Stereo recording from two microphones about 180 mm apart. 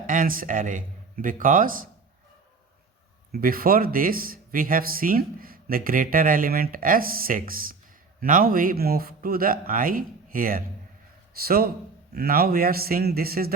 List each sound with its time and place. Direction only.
0.1 s speech: 50° right (ahead or behind)
3.3 s a man's voice: 55° right (ahead or behind)